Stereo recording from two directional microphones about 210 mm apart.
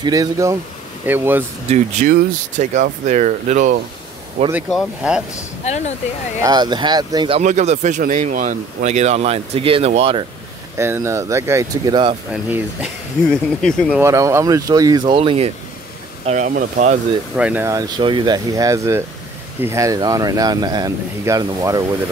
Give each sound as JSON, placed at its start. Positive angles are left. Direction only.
{"t": 0.0, "sound": "speech", "side_deg": -15}
{"t": 1.7, "sound": "speech", "side_deg": -35}
{"t": 4.6, "sound": "speech", "side_deg": 0}
{"t": 5.7, "sound": "speech", "side_deg": 35}
{"t": 6.4, "sound": "speech", "side_deg": -20}
{"t": 10.8, "sound": "speech", "side_deg": -10}
{"t": 12.3, "sound": "speech", "side_deg": -10}
{"t": 13.3, "sound": "speech", "side_deg": 5}
{"t": 13.9, "sound": "speech", "side_deg": -15}
{"t": 17.4, "sound": "speech", "side_deg": -10}